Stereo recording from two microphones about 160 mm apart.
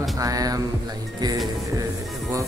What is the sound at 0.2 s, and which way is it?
Music, 20° right (ahead or behind).